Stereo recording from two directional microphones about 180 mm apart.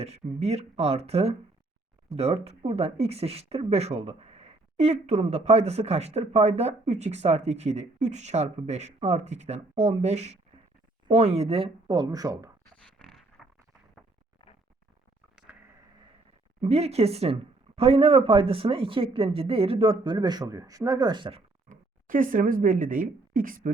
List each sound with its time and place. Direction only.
0.0 s speech: 35° right (ahead or behind); by 12.5 s 20° right (ahead or behind)
12.7 s dog: 5° left (ahead or behind)
15.4 s a sound: 5° right (ahead or behind)
16.6 s speech: 35° right (ahead or behind)
21.7 s speech: 50° right (ahead or behind)